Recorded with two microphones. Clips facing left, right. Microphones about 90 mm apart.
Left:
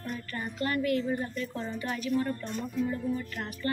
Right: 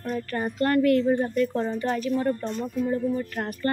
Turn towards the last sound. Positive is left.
turn(degrees=-40)  # may be behind; listen again after turning